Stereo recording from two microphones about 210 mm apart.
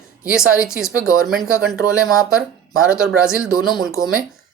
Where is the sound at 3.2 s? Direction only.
5° right (ahead or behind).